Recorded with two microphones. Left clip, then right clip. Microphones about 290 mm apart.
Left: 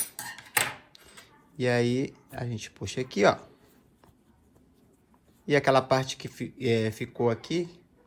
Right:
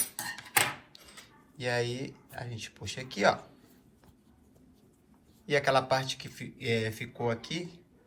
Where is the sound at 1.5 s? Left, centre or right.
Left.